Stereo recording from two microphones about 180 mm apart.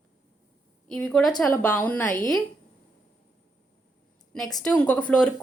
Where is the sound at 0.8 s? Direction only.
5° left (ahead or behind).